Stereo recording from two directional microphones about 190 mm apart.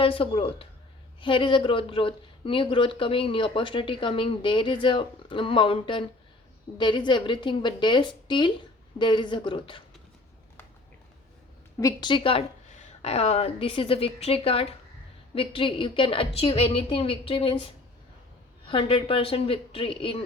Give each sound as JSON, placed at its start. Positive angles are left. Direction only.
{"t": 0.0, "sound": "speech", "side_deg": 30}
{"t": 11.8, "sound": "a woman's voice", "side_deg": 20}
{"t": 18.6, "sound": "speech", "side_deg": 30}